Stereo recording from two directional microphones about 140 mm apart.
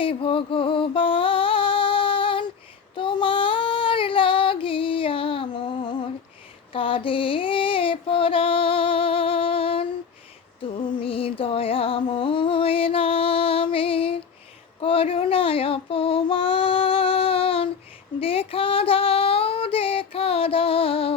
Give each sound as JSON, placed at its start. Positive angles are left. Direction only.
{"t": 0.0, "sound": "music", "side_deg": 40}
{"t": 2.9, "sound": "child singing", "side_deg": 35}
{"t": 6.7, "sound": "female singing", "side_deg": 40}
{"t": 10.8, "sound": "music", "side_deg": 40}
{"t": 14.8, "sound": "child singing", "side_deg": 40}
{"t": 18.2, "sound": "female singing", "side_deg": 40}